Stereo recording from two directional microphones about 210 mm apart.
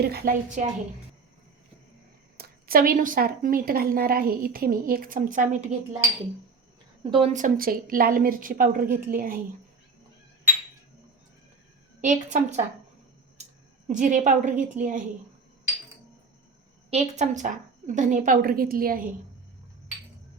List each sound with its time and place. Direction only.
0.0 s a woman's voice: 50° right (ahead or behind)
2.4 s a woman's voice: 45° right (ahead or behind)
7.1 s a woman's voice: 35° right (ahead or behind)
12.0 s a woman's voice: 35° right (ahead or behind)
13.8 s a woman's voice: 35° right (ahead or behind)
16.9 s a woman's voice: 35° right (ahead or behind)